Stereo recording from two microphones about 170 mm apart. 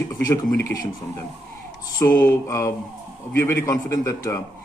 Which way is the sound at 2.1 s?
15° left (ahead or behind).